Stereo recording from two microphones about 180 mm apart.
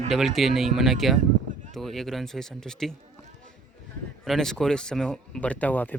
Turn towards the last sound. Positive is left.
turn(degrees=10)  # may be behind; listen again after turning